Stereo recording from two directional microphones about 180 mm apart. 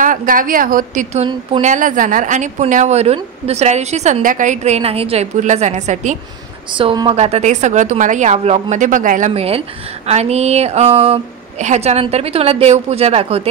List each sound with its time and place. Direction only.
0.0 s a woman's voice: 50° right (ahead or behind)
6.7 s speech: 25° right (ahead or behind)